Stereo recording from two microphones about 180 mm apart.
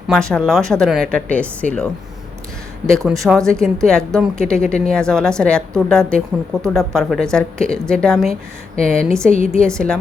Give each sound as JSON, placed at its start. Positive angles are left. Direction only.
{"t": 0.1, "sound": "a woman's voice", "side_deg": 5}
{"t": 3.1, "sound": "a woman's voice", "side_deg": 0}
{"t": 9.3, "sound": "a woman's voice", "side_deg": 35}
{"t": 9.6, "sound": "a woman's voice", "side_deg": 5}